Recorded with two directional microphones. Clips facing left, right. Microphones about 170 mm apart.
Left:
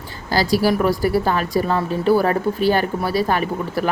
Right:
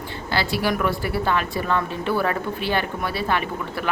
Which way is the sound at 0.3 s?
40° left (ahead or behind).